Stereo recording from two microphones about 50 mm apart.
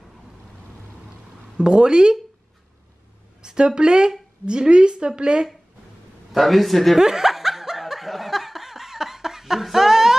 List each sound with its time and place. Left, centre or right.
1.6 s speech: centre
3.4 s speech: centre
6.3 s a man's voice: centre
7.0 s snicker: centre